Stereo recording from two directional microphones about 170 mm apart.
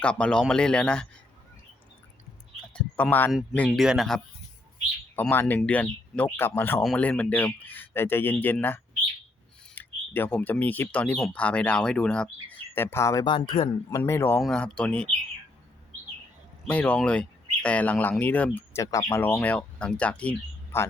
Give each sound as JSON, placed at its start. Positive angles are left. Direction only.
{"t": 0.0, "sound": "a man's voice", "side_deg": 5}
{"t": 2.7, "sound": "speech", "side_deg": 5}
{"t": 3.7, "sound": "a man's voice", "side_deg": -5}
{"t": 5.1, "sound": "speech", "side_deg": 10}
{"t": 14.0, "sound": "speech", "side_deg": 15}
{"t": 14.4, "sound": "a man's voice", "side_deg": 5}
{"t": 16.6, "sound": "speech", "side_deg": 10}